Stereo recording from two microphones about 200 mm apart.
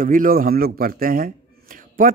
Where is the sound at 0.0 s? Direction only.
45° right (ahead or behind).